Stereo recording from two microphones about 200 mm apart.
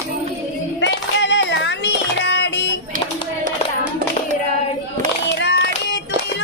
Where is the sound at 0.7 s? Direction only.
65° left (ahead or behind).